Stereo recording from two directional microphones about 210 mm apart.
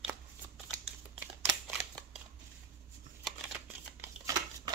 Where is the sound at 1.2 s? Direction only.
10° right (ahead or behind).